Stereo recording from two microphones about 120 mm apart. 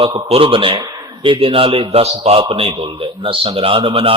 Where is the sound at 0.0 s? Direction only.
45° right (ahead or behind).